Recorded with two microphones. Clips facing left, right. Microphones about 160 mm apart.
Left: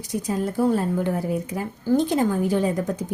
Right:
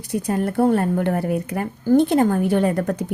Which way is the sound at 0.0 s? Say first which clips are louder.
Right 3 dB; 60° right (ahead or behind).